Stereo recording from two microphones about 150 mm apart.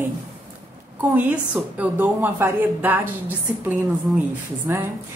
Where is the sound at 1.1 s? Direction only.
10° right (ahead or behind).